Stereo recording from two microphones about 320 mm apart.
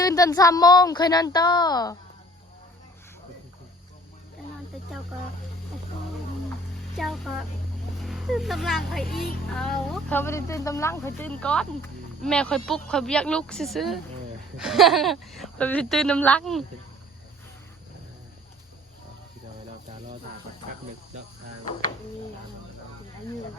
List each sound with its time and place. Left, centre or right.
0.0 s speech: centre
6.9 s speech: centre
9.0 s a child's voice: left
9.5 s speech: centre